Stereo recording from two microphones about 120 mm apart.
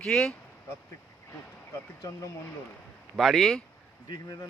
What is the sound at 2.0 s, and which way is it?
Speech, 30° left (ahead or behind).